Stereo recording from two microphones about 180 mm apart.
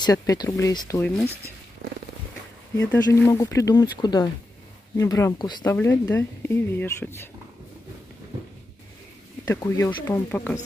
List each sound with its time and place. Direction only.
0.0 s speech: 20° left (ahead or behind)
2.8 s speech: 10° left (ahead or behind)
5.7 s speech: 10° left (ahead or behind)
9.4 s speech: 15° left (ahead or behind)